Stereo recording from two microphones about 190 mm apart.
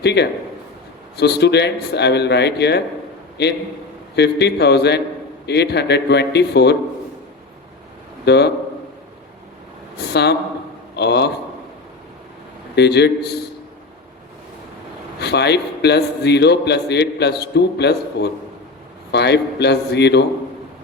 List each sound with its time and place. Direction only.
0.0 s a man's voice: 60° left (ahead or behind)
4.1 s a man's voice: 60° left (ahead or behind)
8.2 s a man's voice: 60° left (ahead or behind)
10.1 s a man's voice: 60° left (ahead or behind)
12.7 s a man's voice: 60° left (ahead or behind)
15.2 s a man's voice: 60° left (ahead or behind)